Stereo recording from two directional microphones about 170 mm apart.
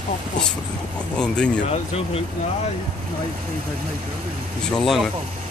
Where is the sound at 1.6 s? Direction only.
40° left (ahead or behind).